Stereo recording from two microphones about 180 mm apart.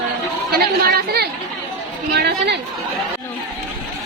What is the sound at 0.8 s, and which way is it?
Speech, 60° right (ahead or behind).